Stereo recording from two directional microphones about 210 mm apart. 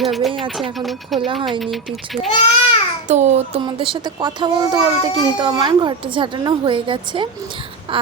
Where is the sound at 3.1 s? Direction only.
30° right (ahead or behind).